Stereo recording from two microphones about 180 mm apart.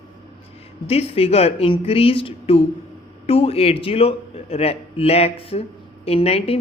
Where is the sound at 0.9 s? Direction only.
35° left (ahead or behind).